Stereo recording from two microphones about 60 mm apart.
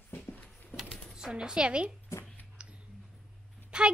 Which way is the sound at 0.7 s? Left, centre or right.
Centre.